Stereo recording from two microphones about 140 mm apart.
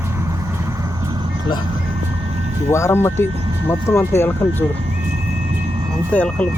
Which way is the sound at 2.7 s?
20° left (ahead or behind).